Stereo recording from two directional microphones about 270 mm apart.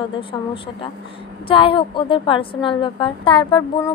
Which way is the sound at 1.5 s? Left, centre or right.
Centre.